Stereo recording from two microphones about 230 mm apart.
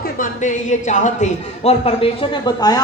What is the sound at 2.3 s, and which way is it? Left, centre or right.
Speech, centre.